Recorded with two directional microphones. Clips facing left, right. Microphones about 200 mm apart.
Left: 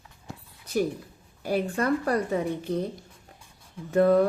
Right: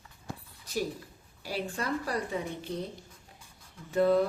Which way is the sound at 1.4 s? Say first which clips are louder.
Left 8 dB; 50° left (ahead or behind).